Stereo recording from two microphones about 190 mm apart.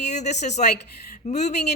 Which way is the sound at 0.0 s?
35° left (ahead or behind).